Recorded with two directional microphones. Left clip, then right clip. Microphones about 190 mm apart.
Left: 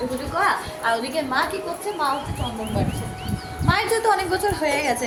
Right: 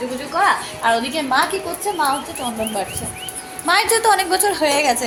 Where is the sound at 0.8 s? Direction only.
30° right (ahead or behind).